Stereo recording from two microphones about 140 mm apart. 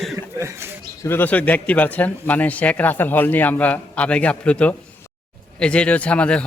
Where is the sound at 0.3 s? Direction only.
20° right (ahead or behind).